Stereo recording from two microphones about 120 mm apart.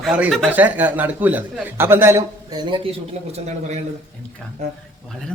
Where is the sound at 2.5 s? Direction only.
45° right (ahead or behind).